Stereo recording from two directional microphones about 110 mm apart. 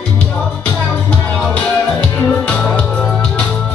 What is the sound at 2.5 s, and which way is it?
Music, 10° left (ahead or behind).